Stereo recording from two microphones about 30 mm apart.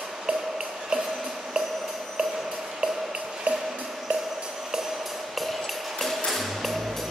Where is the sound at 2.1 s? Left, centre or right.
Centre.